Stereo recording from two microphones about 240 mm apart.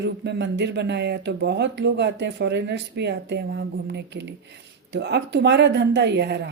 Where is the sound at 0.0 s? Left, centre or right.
Right.